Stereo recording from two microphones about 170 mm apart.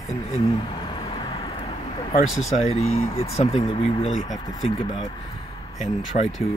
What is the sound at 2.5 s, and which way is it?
Speech, 40° left (ahead or behind).